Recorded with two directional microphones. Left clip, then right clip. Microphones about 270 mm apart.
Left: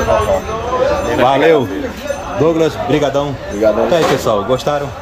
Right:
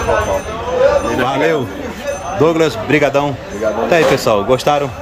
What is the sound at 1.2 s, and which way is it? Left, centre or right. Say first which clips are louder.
Speech: left 5 dB; centre.